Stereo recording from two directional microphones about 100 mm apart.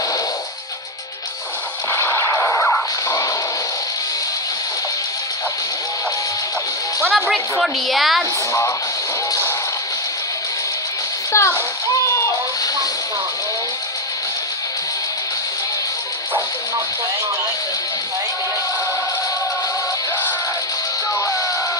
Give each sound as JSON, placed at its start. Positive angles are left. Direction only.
{"t": 1.9, "sound": "artillery fire", "side_deg": 30}
{"t": 7.1, "sound": "a woman's voice", "side_deg": 5}
{"t": 11.3, "sound": "a child's voice", "side_deg": 30}
{"t": 11.9, "sound": "a sound", "side_deg": 35}